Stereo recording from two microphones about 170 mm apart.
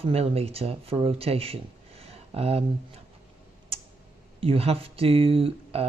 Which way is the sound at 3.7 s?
35° right (ahead or behind).